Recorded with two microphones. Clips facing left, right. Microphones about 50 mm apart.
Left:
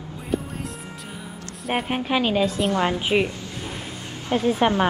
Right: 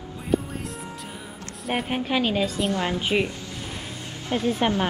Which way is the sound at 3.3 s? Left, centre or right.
Left.